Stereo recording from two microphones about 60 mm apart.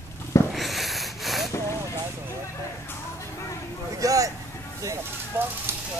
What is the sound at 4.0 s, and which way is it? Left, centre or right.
Vehicle, right.